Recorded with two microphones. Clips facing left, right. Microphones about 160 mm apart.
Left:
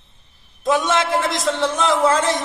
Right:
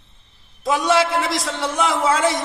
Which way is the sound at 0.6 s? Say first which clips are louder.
Right 1 dB; centre (ahead or behind).